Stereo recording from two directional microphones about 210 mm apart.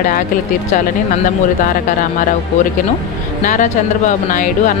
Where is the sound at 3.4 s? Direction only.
35° left (ahead or behind).